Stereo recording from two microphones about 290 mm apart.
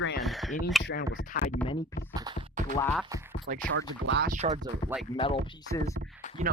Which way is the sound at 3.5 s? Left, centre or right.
Right.